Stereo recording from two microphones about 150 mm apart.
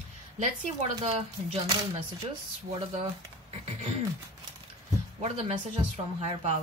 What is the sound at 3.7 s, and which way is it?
Speech, 45° right (ahead or behind).